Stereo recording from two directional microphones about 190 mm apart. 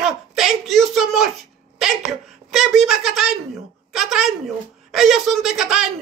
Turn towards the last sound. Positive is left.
turn(degrees=0)  # may be behind; listen again after turning